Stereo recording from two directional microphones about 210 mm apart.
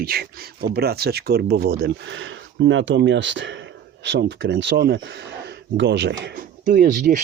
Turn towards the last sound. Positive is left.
turn(degrees=-40)  # may be behind; listen again after turning